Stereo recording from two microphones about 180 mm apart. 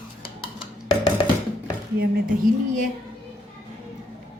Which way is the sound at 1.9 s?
50° right (ahead or behind).